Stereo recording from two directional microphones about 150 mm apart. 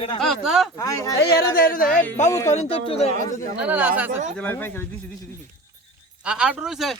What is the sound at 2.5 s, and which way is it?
Speech, 40° left (ahead or behind).